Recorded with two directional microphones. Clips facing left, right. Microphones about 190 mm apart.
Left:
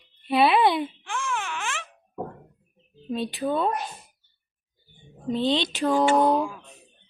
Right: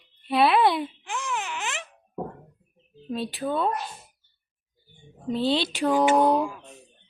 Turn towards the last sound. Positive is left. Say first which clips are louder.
# even
turn(degrees=-10)  # may be behind; listen again after turning